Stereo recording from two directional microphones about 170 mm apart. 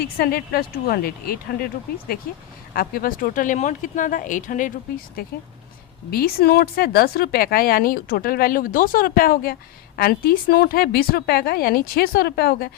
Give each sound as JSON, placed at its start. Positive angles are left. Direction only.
{"t": 0.2, "sound": "a woman's voice", "side_deg": 60}
{"t": 2.7, "sound": "a woman's voice", "side_deg": 60}